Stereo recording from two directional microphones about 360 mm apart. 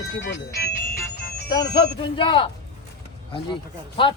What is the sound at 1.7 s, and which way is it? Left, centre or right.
Speech, centre.